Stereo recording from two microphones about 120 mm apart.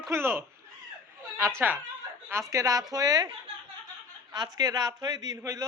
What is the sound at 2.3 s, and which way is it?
Speech, 25° right (ahead or behind).